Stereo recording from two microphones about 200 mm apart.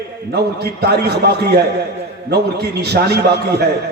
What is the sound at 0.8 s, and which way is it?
A man's voice, 55° right (ahead or behind).